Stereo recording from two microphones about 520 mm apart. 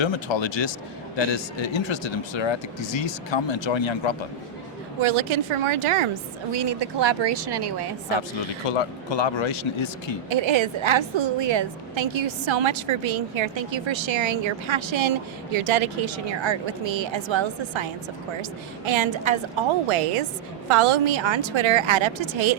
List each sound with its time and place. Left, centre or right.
0.0 s speech: left
4.9 s a woman's voice: right
6.5 s speech: right
8.6 s speech: left
10.2 s a woman's voice: right
19.9 s a woman's voice: right